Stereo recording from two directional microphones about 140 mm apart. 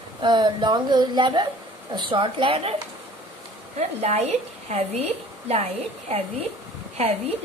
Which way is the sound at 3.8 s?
50° right (ahead or behind).